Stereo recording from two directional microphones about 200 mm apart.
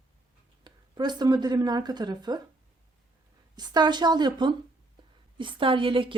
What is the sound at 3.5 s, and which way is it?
A woman's voice, 20° right (ahead or behind).